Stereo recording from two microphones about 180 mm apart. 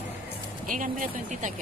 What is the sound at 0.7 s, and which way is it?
Speech, 50° right (ahead or behind).